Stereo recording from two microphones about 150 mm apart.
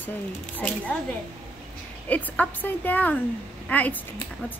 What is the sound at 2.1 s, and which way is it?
A woman's voice, 10° left (ahead or behind).